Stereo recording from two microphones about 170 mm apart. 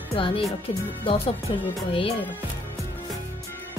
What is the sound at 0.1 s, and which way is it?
Speech, 35° left (ahead or behind).